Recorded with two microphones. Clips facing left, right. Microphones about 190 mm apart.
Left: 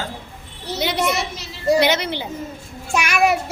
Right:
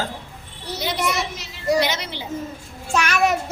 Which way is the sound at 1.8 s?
65° left (ahead or behind).